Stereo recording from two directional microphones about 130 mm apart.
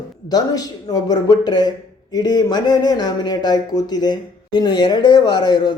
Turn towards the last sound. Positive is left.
turn(degrees=35)  # may be behind; listen again after turning